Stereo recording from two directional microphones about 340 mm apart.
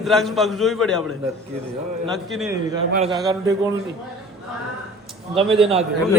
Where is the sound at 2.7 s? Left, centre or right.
Centre.